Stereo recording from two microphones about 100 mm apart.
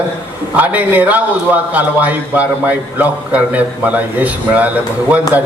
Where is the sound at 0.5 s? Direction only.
15° right (ahead or behind).